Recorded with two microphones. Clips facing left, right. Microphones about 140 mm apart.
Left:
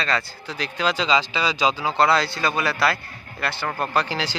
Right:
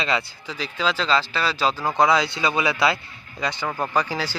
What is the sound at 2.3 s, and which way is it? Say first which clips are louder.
Speech: right 1 dB; 20° right (ahead or behind).